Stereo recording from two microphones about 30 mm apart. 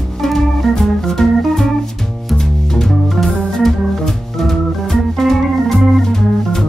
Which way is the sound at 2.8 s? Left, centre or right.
Centre.